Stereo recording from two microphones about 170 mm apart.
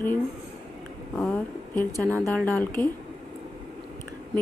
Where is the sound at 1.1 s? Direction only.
10° left (ahead or behind).